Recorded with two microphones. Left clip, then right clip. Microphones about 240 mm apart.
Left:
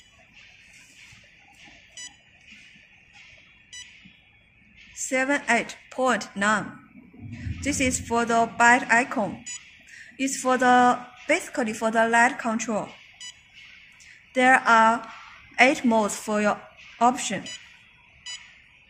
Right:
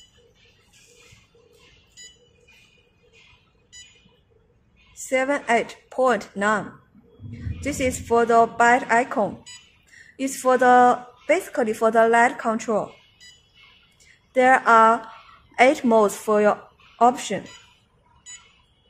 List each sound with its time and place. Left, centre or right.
5.1 s a woman's voice: right
7.6 s a woman's voice: right
14.3 s a woman's voice: right